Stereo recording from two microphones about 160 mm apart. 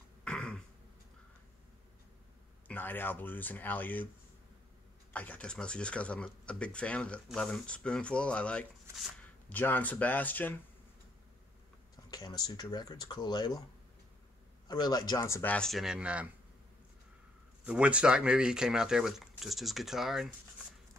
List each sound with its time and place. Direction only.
0.2 s throat clearing: 5° left (ahead or behind)
2.7 s speech: 10° left (ahead or behind)
5.1 s speech: 10° left (ahead or behind)
12.1 s speech: 25° left (ahead or behind)
14.7 s speech: 25° left (ahead or behind); by 16.3 s 5° right (ahead or behind)
17.6 s speech: 5° right (ahead or behind)